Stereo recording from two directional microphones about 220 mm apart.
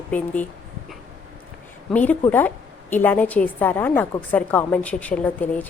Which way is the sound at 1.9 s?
5° left (ahead or behind).